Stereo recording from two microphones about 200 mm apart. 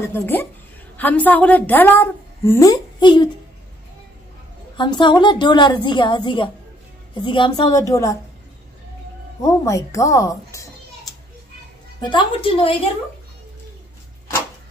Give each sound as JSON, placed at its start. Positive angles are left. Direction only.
{"t": 0.1, "sound": "a woman's voice", "side_deg": 10}
{"t": 4.7, "sound": "a woman's voice", "side_deg": 25}
{"t": 9.4, "sound": "a woman's voice", "side_deg": 15}
{"t": 12.0, "sound": "a woman's voice", "side_deg": 20}